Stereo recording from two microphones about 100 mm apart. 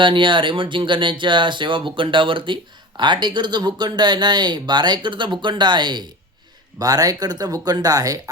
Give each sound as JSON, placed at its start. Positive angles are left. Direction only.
{"t": 0.0, "sound": "speech", "side_deg": -55}
{"t": 6.7, "sound": "speech", "side_deg": -40}